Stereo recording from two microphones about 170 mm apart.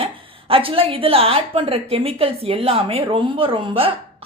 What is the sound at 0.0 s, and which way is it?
A woman's voice, 35° right (ahead or behind).